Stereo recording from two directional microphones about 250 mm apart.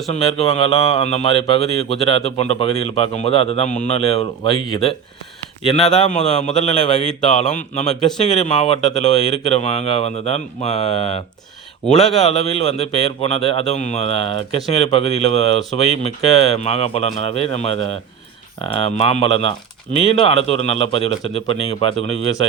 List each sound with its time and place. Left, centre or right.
0.1 s speech: left
6.0 s speech: left
7.0 s speech: centre
7.5 s speech: left
11.9 s speech: centre
12.5 s speech: left
21.9 s speech: right